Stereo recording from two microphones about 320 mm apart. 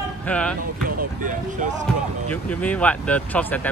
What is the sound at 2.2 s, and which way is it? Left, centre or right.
Speech, centre.